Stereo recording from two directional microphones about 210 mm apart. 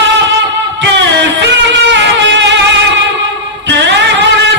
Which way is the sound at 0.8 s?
60° right (ahead or behind).